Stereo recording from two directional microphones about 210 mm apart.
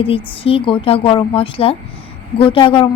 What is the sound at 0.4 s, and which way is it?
A woman's voice, 25° left (ahead or behind).